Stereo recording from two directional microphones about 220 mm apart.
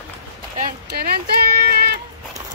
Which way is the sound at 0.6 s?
40° right (ahead or behind).